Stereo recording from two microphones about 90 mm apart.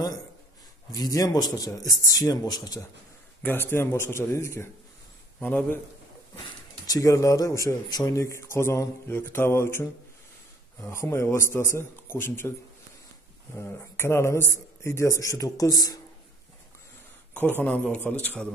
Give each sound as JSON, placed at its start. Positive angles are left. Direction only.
{"t": 0.9, "sound": "speech", "side_deg": 40}
{"t": 3.4, "sound": "a man's voice", "side_deg": 25}
{"t": 5.4, "sound": "a man's voice", "side_deg": 20}
{"t": 6.9, "sound": "a man's voice", "side_deg": 40}
{"t": 13.6, "sound": "a man's voice", "side_deg": 25}
{"t": 17.3, "sound": "a sound", "side_deg": 20}
{"t": 17.6, "sound": "a man's voice", "side_deg": 20}